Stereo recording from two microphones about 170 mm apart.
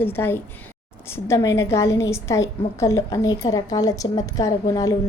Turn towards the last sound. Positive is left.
turn(degrees=20)  # may be behind; listen again after turning